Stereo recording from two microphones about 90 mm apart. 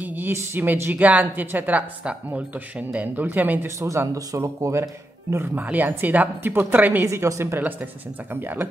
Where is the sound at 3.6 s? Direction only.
35° right (ahead or behind).